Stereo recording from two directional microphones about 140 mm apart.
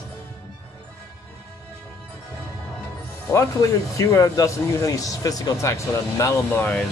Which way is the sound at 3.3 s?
25° left (ahead or behind).